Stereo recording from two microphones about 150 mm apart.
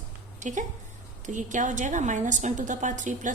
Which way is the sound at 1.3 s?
55° right (ahead or behind).